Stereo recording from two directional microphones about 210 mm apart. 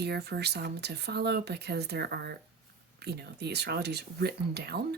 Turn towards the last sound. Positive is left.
turn(degrees=-50)  # may be behind; listen again after turning